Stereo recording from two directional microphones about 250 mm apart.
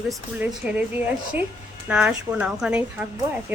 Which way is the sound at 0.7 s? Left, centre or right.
Centre.